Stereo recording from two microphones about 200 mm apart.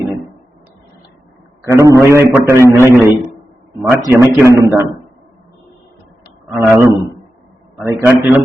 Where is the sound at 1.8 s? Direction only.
15° right (ahead or behind).